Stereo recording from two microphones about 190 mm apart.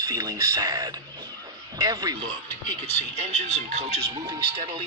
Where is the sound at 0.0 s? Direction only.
20° right (ahead or behind).